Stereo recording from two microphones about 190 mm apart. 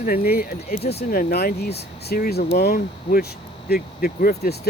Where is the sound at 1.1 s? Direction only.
50° left (ahead or behind).